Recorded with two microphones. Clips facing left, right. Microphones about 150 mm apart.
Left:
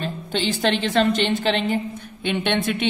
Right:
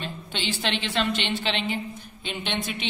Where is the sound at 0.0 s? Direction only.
45° left (ahead or behind).